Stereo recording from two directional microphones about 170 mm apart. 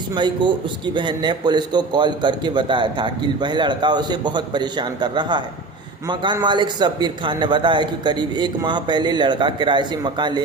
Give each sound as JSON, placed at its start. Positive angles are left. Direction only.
{"t": 0.1, "sound": "a man's voice", "side_deg": -25}